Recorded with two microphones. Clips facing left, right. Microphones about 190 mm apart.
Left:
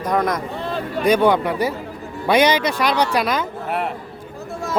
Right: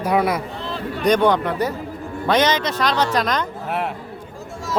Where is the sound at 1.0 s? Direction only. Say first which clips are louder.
Left 1 dB; 10° left (ahead or behind).